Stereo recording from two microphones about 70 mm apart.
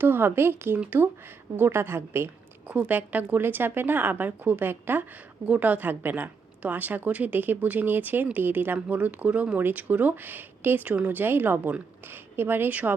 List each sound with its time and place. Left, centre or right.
0.0 s a woman's voice: right
2.6 s a woman's voice: right